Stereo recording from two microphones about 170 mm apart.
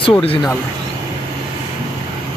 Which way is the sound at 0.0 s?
30° left (ahead or behind).